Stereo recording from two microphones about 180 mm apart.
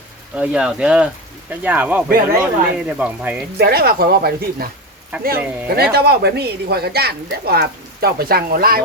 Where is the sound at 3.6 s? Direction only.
60° right (ahead or behind).